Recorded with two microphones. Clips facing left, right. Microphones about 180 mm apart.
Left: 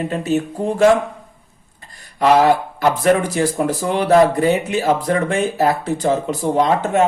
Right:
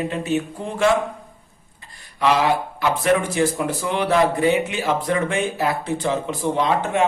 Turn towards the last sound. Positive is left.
turn(degrees=40)  # may be behind; listen again after turning